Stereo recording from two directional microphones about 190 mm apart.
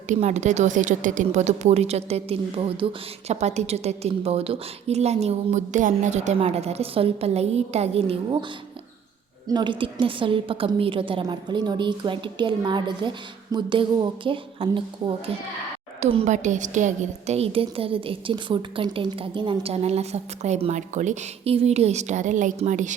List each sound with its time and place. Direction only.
0.1 s a woman's voice: 40° right (ahead or behind)
9.5 s a woman's voice: 25° right (ahead or behind); by 23.0 s 40° right (ahead or behind)